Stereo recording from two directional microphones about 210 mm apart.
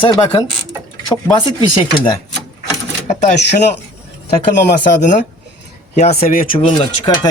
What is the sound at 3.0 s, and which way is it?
Speech, 35° left (ahead or behind).